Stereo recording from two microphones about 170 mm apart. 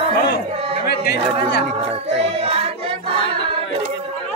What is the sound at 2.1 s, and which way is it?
Music, 35° right (ahead or behind).